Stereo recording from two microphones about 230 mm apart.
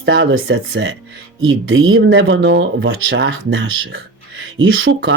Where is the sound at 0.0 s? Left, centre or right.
Right.